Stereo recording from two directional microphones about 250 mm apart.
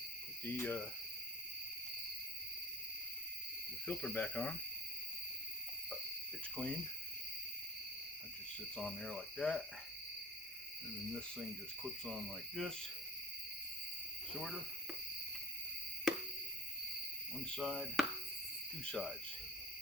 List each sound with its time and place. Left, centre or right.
0.4 s hoot: centre
3.8 s cricket: centre
8.7 s cricket: centre
11.1 s cricket: centre
14.3 s cricket: centre
16.1 s cricket: centre
17.4 s cricket: centre